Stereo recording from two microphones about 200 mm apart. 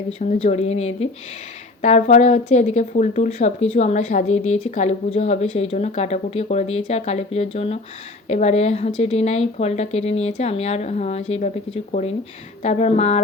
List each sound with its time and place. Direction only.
0.2 s speech: 35° left (ahead or behind)